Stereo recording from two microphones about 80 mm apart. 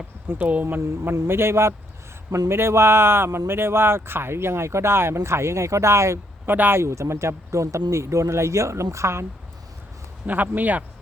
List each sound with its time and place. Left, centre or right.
0.3 s speech: right
10.2 s speech: right